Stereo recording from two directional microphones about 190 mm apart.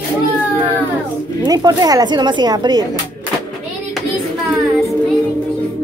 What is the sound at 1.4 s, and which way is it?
Speech, 20° right (ahead or behind).